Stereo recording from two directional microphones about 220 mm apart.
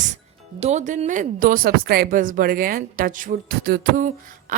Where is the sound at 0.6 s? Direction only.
30° right (ahead or behind).